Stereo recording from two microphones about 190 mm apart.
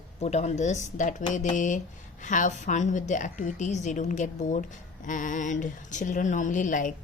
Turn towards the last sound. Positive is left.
turn(degrees=45)  # may be behind; listen again after turning